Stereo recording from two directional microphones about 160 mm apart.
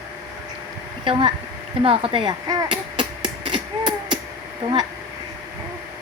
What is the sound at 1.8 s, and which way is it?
Hammer, 35° right (ahead or behind).